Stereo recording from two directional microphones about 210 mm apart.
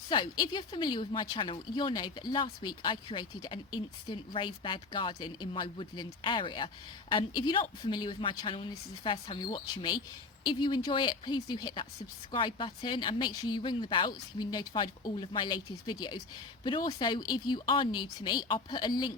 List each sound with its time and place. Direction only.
0.1 s speech: 25° left (ahead or behind)